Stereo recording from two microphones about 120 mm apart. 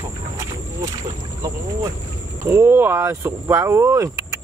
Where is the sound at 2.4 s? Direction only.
20° right (ahead or behind).